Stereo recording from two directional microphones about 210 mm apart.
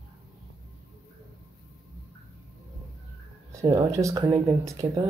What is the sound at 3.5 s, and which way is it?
Speech, 15° right (ahead or behind).